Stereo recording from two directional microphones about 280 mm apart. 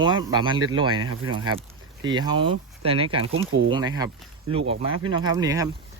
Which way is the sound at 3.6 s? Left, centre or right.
Centre.